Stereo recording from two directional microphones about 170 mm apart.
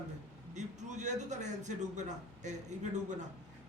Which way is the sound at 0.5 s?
45° right (ahead or behind).